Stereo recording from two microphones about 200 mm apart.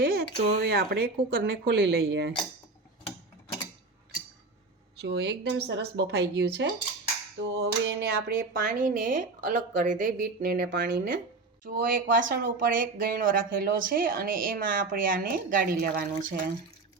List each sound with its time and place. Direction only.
0.0 s speech: 50° right (ahead or behind)
4.9 s speech: 55° right (ahead or behind)